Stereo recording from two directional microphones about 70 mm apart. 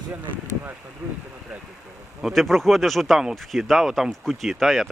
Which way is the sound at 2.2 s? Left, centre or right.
Centre.